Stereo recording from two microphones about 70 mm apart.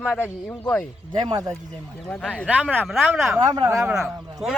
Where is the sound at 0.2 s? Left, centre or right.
Centre.